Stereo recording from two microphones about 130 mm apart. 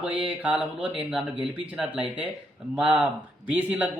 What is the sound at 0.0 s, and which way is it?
A man's voice, 10° right (ahead or behind).